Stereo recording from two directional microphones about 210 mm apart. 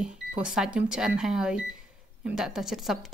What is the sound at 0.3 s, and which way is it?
Speech, 5° right (ahead or behind).